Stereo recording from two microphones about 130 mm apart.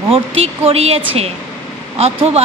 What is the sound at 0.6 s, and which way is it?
Speech, 50° right (ahead or behind).